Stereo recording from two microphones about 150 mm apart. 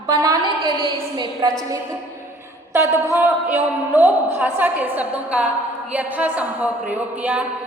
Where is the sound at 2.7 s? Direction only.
20° right (ahead or behind).